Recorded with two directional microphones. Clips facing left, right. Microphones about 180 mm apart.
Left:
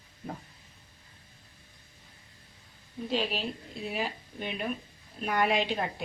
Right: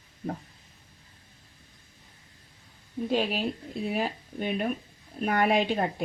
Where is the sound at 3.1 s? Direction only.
50° right (ahead or behind).